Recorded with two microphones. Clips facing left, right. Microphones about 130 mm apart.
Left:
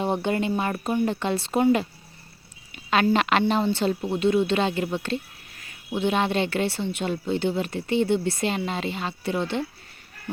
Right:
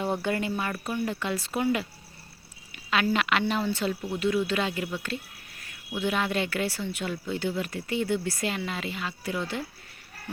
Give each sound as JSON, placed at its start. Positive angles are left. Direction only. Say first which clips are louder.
{"t": 0.0, "sound": "speech", "louder": "left 4 dB", "side_deg": 25}